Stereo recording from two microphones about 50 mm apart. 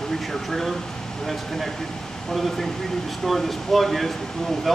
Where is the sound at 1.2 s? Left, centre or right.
Centre.